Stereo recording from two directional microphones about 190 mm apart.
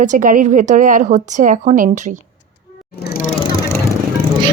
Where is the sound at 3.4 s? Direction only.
20° left (ahead or behind).